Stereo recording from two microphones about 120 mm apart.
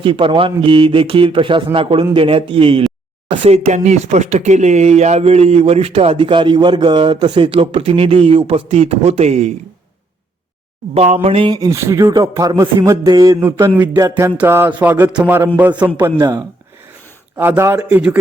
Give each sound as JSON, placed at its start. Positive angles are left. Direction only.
{"t": 0.0, "sound": "a man's voice", "side_deg": -45}
{"t": 6.1, "sound": "a man's voice", "side_deg": -40}
{"t": 10.9, "sound": "speech", "side_deg": -60}
{"t": 11.4, "sound": "a man's voice", "side_deg": -30}
{"t": 13.4, "sound": "a man's voice", "side_deg": -20}
{"t": 16.0, "sound": "a man's voice", "side_deg": -25}